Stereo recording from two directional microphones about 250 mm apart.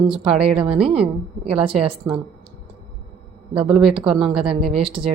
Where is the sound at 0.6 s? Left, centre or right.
Right.